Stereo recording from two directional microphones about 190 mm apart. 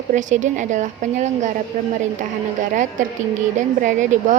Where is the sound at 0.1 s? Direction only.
40° right (ahead or behind).